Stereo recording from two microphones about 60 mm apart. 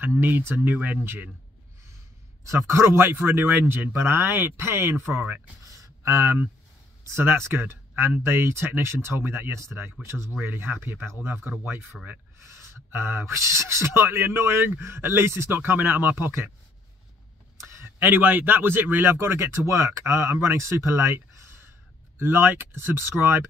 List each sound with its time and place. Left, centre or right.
0.0 s speech: right
2.4 s speech: right
5.7 s a sound: right
7.1 s speech: right
12.4 s speech: right
17.6 s a sound: right
17.8 s speech: right